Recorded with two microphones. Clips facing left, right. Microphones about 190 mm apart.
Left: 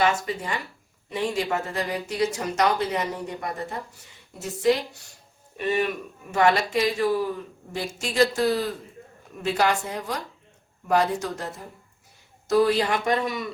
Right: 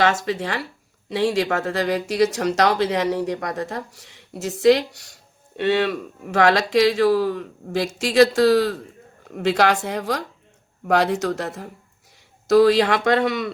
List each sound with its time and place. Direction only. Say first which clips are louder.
0.0 s speech: right 3 dB; 85° right